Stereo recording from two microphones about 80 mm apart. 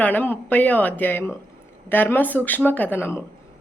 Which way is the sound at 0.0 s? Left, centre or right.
Left.